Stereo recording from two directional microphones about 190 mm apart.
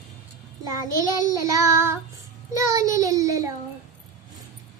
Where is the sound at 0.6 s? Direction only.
20° right (ahead or behind).